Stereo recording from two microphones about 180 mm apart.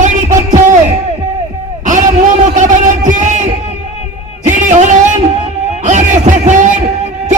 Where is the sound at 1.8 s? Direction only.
45° right (ahead or behind).